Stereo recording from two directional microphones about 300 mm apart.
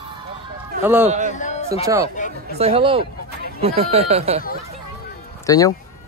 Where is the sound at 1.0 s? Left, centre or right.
Right.